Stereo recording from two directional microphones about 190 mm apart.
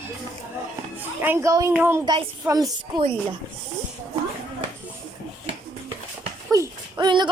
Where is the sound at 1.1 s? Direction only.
10° right (ahead or behind).